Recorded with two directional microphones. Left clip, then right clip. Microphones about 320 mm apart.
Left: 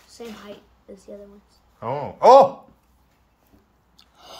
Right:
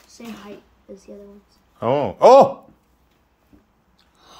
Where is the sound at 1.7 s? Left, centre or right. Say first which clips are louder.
Right 8 dB; right.